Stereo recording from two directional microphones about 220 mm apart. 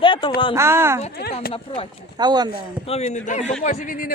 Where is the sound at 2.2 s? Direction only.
20° right (ahead or behind).